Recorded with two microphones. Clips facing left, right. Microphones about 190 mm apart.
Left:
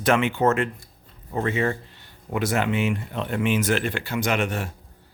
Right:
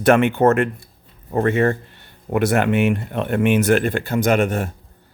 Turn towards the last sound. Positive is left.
turn(degrees=-50)  # may be behind; listen again after turning